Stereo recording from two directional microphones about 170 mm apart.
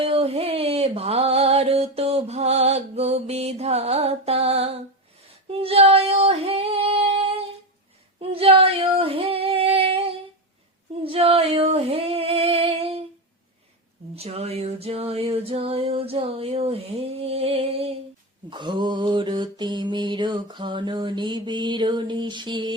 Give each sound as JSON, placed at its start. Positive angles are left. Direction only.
{"t": 0.0, "sound": "music", "side_deg": -35}
{"t": 5.5, "sound": "female singing", "side_deg": -35}
{"t": 8.2, "sound": "female singing", "side_deg": -35}
{"t": 11.0, "sound": "female singing", "side_deg": -35}
{"t": 14.2, "sound": "music", "side_deg": -35}
{"t": 18.5, "sound": "mantra", "side_deg": -25}